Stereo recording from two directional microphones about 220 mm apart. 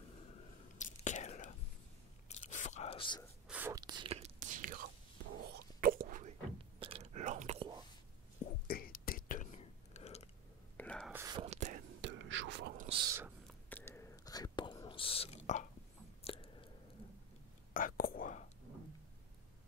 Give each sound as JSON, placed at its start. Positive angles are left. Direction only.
{"t": 0.7, "sound": "whispering", "side_deg": 35}
{"t": 2.2, "sound": "biting", "side_deg": 30}
{"t": 3.4, "sound": "whispering", "side_deg": -10}
{"t": 6.8, "sound": "whispering", "side_deg": -25}
{"t": 8.6, "sound": "whispering", "side_deg": 40}
{"t": 10.8, "sound": "whispering", "side_deg": 5}
{"t": 11.1, "sound": "whispering", "side_deg": -10}
{"t": 11.3, "sound": "whispering", "side_deg": -30}
{"t": 12.0, "sound": "whispering", "side_deg": -55}
{"t": 12.7, "sound": "a sound", "side_deg": -30}
{"t": 13.0, "sound": "a sound", "side_deg": -10}
{"t": 13.7, "sound": "whispering", "side_deg": 10}
{"t": 16.3, "sound": "chewing", "side_deg": 25}
{"t": 17.7, "sound": "whispering", "side_deg": 40}